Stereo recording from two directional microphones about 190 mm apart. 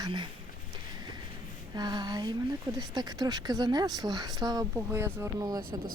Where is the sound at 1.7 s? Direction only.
20° right (ahead or behind).